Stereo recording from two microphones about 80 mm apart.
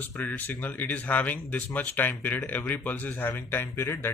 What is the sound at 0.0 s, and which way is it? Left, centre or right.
Speech, left.